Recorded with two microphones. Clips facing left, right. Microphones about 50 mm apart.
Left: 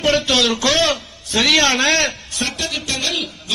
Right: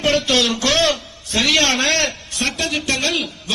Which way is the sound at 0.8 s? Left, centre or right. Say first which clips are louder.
Even; left.